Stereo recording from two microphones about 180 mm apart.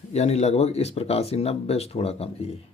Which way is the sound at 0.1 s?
35° left (ahead or behind).